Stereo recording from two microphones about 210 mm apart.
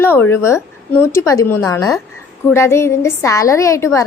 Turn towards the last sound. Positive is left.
turn(degrees=15)  # may be behind; listen again after turning